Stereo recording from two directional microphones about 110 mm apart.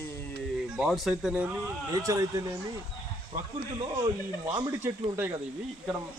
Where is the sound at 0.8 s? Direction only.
Centre (ahead or behind).